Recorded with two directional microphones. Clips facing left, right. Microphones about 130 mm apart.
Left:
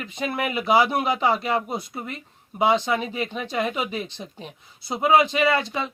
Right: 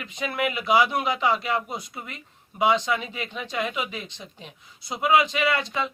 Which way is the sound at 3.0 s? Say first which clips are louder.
Left 5 dB; 45° left (ahead or behind).